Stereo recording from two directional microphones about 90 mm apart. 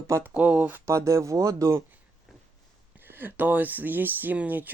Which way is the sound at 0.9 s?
35° right (ahead or behind).